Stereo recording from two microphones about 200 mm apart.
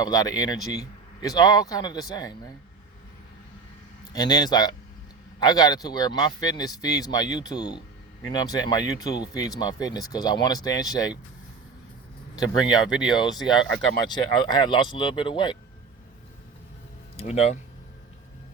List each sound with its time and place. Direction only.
0.0 s speech: 20° left (ahead or behind)
4.1 s speech: 20° left (ahead or behind)
12.7 s speech: 5° right (ahead or behind)
14.1 s speech: 20° left (ahead or behind)
17.2 s speech: 30° left (ahead or behind)